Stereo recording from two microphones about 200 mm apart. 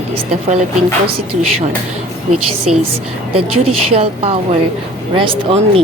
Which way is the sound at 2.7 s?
35° right (ahead or behind).